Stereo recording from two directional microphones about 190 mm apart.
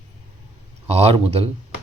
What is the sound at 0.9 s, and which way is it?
Speech, 30° right (ahead or behind).